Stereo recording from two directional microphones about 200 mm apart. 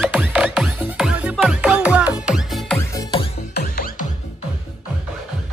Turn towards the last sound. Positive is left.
turn(degrees=45)  # may be behind; listen again after turning